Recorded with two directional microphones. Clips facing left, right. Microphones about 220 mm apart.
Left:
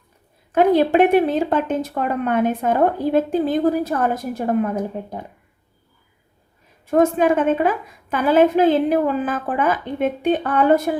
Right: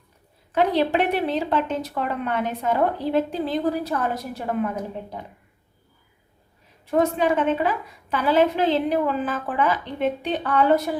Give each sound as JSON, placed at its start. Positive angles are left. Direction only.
{"t": 0.5, "sound": "a woman's voice", "side_deg": 50}
{"t": 6.8, "sound": "a woman's voice", "side_deg": 50}